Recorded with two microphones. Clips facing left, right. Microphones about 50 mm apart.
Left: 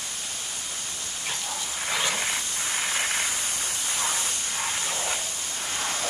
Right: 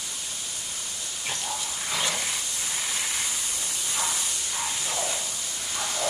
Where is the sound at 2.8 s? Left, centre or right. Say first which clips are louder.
Left 5 dB; left.